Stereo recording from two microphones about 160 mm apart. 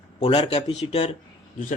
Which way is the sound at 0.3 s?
35° left (ahead or behind).